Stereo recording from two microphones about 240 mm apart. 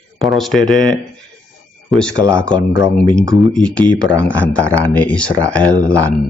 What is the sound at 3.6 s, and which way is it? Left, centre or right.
Speech, centre.